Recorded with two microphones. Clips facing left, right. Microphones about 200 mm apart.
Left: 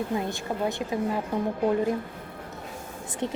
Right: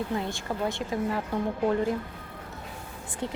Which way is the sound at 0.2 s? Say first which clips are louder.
Left 2 dB; 15° left (ahead or behind).